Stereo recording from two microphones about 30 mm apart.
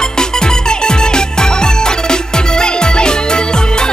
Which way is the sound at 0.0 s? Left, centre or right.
Left.